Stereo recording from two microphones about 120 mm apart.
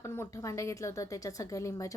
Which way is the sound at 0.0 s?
25° left (ahead or behind).